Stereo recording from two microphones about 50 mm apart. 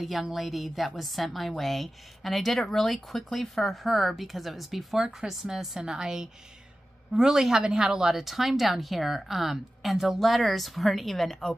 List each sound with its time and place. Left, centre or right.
0.0 s a woman's voice: centre